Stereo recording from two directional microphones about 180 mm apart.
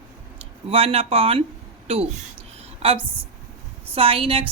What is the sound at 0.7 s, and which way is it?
Speech, 35° right (ahead or behind).